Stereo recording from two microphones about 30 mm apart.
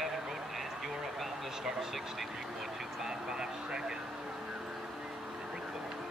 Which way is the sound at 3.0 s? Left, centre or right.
Centre.